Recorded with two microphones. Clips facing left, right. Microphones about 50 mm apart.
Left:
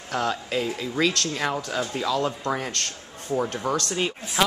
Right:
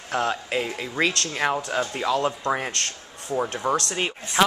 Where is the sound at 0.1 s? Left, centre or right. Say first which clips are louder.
Right 1 dB; right.